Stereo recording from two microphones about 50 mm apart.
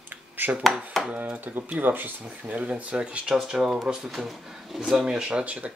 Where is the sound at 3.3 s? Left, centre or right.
Centre.